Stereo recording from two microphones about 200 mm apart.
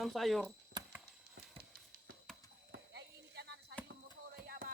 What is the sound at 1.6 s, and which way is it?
Clip-clop, 50° right (ahead or behind).